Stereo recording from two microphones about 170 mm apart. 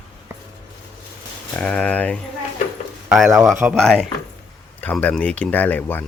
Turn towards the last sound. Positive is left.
turn(degrees=10)  # may be behind; listen again after turning